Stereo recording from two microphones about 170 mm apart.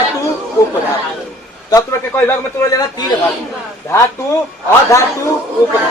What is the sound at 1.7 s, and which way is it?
A man's voice, 20° left (ahead or behind).